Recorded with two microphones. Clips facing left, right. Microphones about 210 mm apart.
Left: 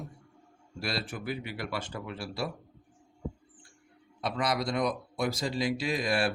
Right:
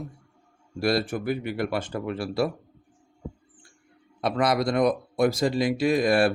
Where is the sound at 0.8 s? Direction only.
50° right (ahead or behind).